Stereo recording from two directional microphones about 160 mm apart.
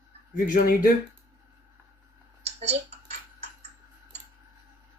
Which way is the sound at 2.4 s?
40° right (ahead or behind).